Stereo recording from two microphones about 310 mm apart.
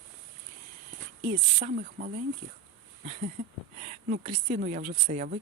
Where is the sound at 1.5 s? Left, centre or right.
Right.